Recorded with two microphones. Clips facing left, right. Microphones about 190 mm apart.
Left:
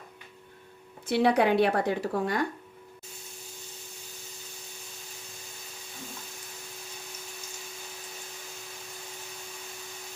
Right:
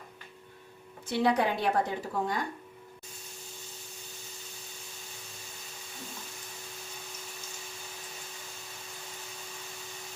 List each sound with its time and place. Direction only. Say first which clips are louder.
1.0 s speech: left 4 dB; 65° left (ahead or behind)